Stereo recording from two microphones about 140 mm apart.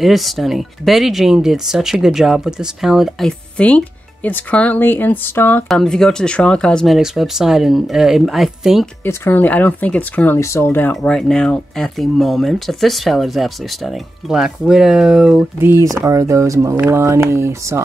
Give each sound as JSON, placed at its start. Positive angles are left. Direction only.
{"t": 0.0, "sound": "speech", "side_deg": 0}
{"t": 5.7, "sound": "speech", "side_deg": 5}
{"t": 9.0, "sound": "speech", "side_deg": 15}
{"t": 10.9, "sound": "speech", "side_deg": 5}
{"t": 15.6, "sound": "speech", "side_deg": -20}